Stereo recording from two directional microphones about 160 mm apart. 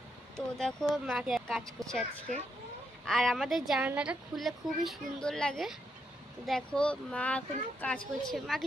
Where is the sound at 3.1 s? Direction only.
Centre (ahead or behind).